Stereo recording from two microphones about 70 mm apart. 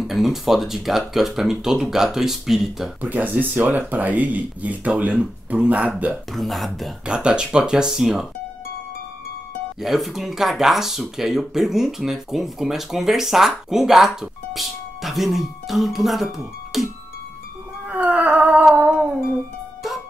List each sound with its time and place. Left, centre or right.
0.0 s speech: centre
3.0 s speech: right
6.3 s speech: centre
7.1 s speech: centre
9.8 s speech: centre
17.8 s humming: right